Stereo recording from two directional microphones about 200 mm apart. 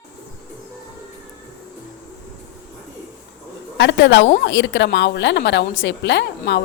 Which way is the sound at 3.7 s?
60° left (ahead or behind).